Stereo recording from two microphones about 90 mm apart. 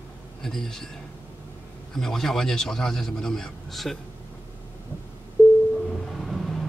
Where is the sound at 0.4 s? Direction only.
5° left (ahead or behind).